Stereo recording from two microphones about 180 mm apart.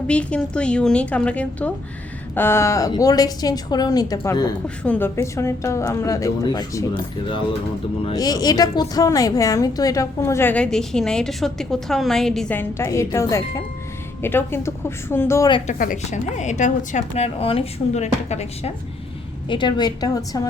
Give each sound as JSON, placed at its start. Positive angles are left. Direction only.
{"t": 0.1, "sound": "a woman's voice", "side_deg": 5}
{"t": 4.8, "sound": "a woman's voice", "side_deg": 10}
{"t": 15.6, "sound": "a woman's voice", "side_deg": 45}
{"t": 19.5, "sound": "a woman's voice", "side_deg": 25}